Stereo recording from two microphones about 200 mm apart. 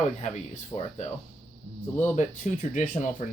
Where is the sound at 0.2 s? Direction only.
35° left (ahead or behind).